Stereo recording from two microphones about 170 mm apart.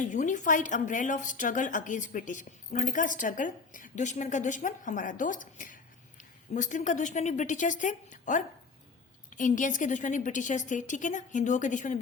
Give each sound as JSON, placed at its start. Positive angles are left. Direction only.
{"t": 0.0, "sound": "a woman's voice", "side_deg": 45}